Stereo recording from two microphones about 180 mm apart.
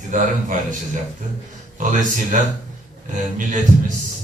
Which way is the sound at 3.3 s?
45° right (ahead or behind).